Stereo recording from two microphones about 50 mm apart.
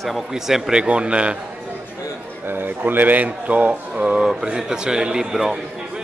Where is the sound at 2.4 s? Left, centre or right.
Right.